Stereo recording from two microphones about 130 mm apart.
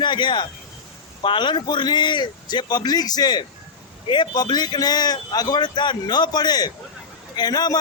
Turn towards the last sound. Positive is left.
turn(degrees=30)  # may be behind; listen again after turning